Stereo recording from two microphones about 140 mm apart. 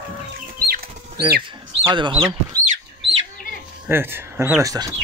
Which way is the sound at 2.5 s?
90° right.